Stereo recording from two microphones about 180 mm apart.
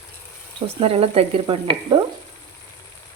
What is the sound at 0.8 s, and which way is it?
Stir, 30° right (ahead or behind).